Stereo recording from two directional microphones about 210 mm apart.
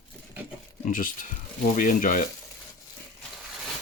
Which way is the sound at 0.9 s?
40° left (ahead or behind).